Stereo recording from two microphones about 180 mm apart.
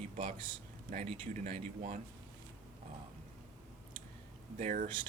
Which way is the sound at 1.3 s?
45° right (ahead or behind).